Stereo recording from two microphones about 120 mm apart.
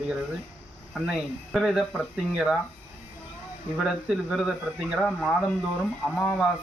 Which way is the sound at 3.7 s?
5° right (ahead or behind).